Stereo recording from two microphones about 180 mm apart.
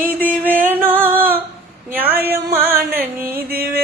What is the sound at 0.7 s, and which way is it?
Music, 10° right (ahead or behind).